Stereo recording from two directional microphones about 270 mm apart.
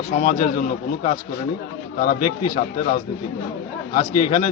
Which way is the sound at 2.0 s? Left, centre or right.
Left.